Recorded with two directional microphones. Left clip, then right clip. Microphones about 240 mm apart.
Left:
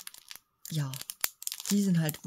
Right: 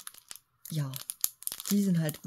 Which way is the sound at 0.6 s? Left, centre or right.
Centre.